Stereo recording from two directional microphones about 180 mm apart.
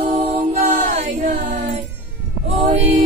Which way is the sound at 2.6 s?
40° right (ahead or behind).